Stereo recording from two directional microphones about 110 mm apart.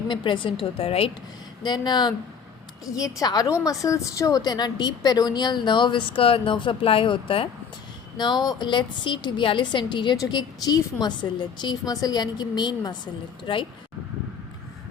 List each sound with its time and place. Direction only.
0.1 s a woman's voice: 50° left (ahead or behind)
1.6 s a woman's voice: 40° left (ahead or behind)
8.2 s a woman's voice: 40° left (ahead or behind)